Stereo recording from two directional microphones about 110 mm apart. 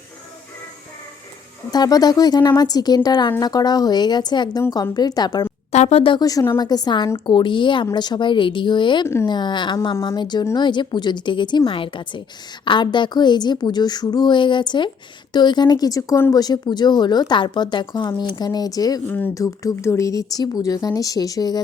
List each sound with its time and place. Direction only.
1.7 s speech: 35° left (ahead or behind)
5.7 s a sound: 90° left
6.0 s a woman's voice: 50° left (ahead or behind)
6.2 s a woman's voice: 30° left (ahead or behind)
19.0 s speech: 15° left (ahead or behind)
19.3 s speech: 30° left (ahead or behind)